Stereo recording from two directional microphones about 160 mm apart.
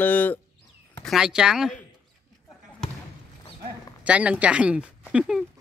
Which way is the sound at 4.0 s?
10° right (ahead or behind).